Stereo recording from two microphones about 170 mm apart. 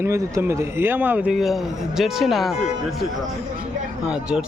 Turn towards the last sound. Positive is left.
turn(degrees=-5)  # may be behind; listen again after turning